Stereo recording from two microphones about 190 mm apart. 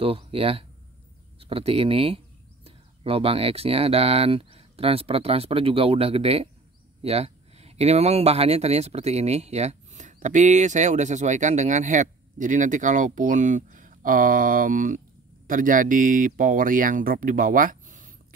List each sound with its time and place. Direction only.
0.0 s speech: 30° right (ahead or behind)